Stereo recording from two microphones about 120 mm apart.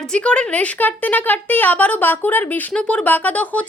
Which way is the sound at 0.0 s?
5° left (ahead or behind).